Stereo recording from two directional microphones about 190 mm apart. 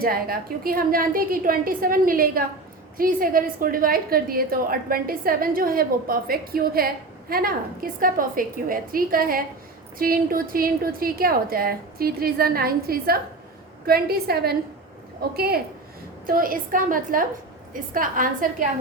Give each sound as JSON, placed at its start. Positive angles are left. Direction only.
{"t": 0.0, "sound": "a woman's voice", "side_deg": -50}